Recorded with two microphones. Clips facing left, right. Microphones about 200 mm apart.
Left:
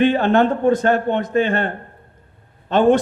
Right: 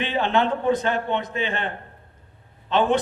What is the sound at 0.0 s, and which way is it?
A man's voice, 50° left (ahead or behind).